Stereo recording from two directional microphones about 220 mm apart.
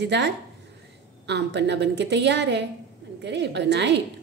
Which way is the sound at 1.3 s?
50° right (ahead or behind).